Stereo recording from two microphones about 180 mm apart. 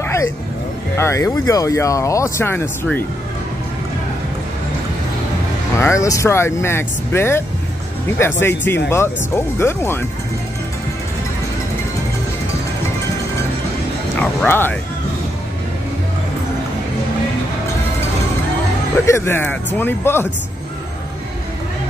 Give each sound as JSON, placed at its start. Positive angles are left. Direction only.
{"t": 0.0, "sound": "a sound", "side_deg": 15}
{"t": 0.9, "sound": "speech", "side_deg": 15}
{"t": 5.8, "sound": "speech", "side_deg": 15}
{"t": 14.2, "sound": "speech", "side_deg": 10}
{"t": 19.0, "sound": "speech", "side_deg": 15}